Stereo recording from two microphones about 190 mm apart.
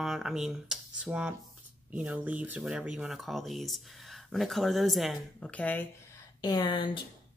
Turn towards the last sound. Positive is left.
turn(degrees=25)  # may be behind; listen again after turning